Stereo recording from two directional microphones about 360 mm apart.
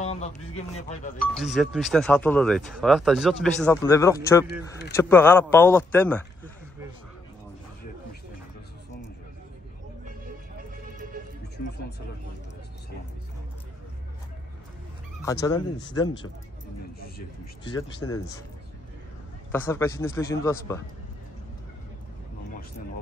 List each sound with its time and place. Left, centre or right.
0.0 s speech: centre
1.2 s speech: centre
15.4 s a man's voice: centre
17.6 s a man's voice: centre
19.5 s a man's voice: centre